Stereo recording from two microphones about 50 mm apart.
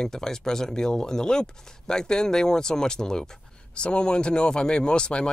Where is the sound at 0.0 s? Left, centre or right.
Centre.